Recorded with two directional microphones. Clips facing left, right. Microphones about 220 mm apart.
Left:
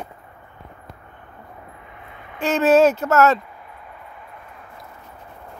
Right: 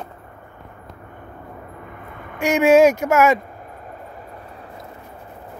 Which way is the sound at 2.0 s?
50° right (ahead or behind).